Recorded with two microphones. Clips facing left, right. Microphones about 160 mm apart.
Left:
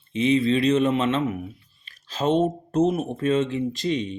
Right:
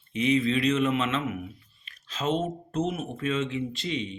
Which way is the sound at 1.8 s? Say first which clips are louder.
Left 6 dB; 35° left (ahead or behind).